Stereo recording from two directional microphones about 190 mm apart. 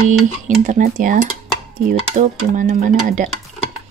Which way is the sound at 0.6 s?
40° right (ahead or behind).